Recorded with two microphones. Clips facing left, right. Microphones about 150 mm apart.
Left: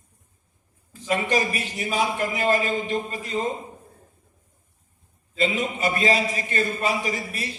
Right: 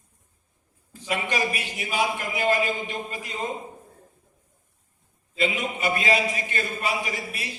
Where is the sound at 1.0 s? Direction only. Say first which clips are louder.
Left 3 dB; 40° left (ahead or behind).